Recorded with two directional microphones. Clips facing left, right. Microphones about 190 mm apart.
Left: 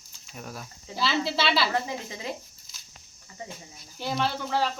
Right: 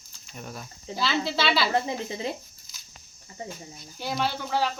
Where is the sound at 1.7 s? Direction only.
30° right (ahead or behind).